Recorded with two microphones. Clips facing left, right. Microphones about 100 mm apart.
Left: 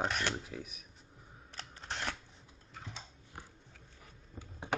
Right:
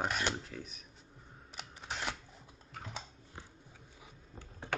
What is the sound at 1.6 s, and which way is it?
Camera, 10° right (ahead or behind).